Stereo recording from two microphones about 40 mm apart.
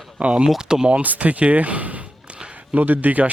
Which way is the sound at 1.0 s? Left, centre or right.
Right.